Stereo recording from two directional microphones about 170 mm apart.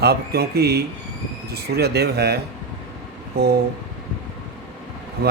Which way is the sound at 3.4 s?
70° right (ahead or behind).